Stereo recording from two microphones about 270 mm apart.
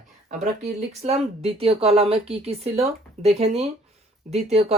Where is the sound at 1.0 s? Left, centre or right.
Right.